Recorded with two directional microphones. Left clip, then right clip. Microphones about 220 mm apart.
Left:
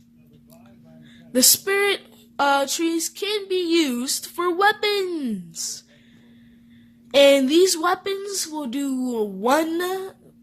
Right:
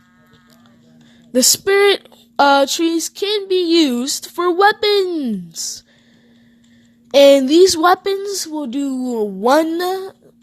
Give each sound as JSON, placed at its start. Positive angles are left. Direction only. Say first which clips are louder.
{"t": 1.3, "sound": "speech", "louder": "right 5 dB", "side_deg": -35}
{"t": 7.1, "sound": "speech", "louder": "right 6 dB", "side_deg": -40}